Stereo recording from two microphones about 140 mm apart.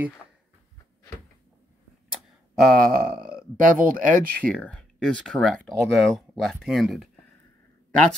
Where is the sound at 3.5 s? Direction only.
75° right (ahead or behind).